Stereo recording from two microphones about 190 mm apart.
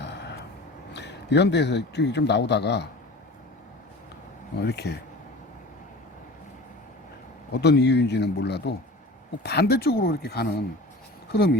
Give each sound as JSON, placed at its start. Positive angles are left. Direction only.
{"t": 0.0, "sound": "vehicle", "side_deg": 65}
{"t": 0.9, "sound": "a man's voice", "side_deg": 65}
{"t": 4.6, "sound": "a man's voice", "side_deg": 60}
{"t": 7.5, "sound": "a man's voice", "side_deg": 60}